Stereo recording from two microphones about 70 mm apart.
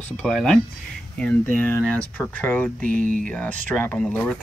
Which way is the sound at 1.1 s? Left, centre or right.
Left.